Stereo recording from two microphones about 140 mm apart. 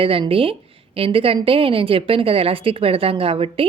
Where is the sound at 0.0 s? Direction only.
40° right (ahead or behind).